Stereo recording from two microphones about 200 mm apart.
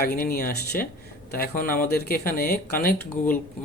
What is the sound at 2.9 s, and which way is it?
Speech, 10° left (ahead or behind).